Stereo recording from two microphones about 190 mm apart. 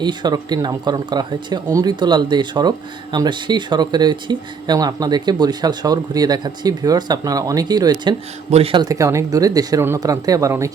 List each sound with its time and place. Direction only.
0.0 s speech: 25° right (ahead or behind)
8.4 s speech: 30° right (ahead or behind); by 10.7 s 15° right (ahead or behind)